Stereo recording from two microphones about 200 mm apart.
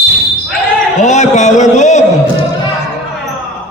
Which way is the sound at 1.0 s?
35° left (ahead or behind).